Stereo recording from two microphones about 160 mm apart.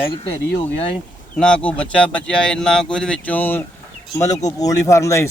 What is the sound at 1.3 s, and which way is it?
Speech, 5° left (ahead or behind).